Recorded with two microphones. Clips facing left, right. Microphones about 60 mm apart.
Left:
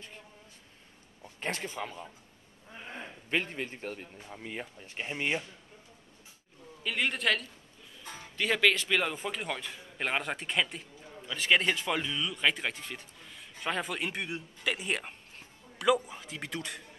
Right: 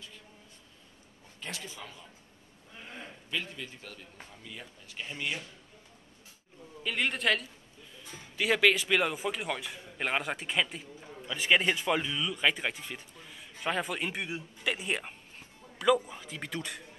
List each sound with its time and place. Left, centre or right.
1.4 s a man's voice: left
6.8 s a man's voice: centre